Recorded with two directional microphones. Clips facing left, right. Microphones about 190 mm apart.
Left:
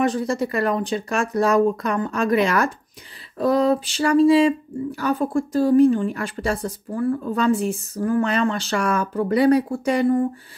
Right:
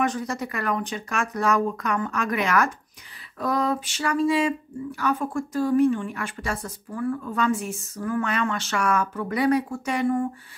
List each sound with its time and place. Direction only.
0.0 s speech: 30° left (ahead or behind)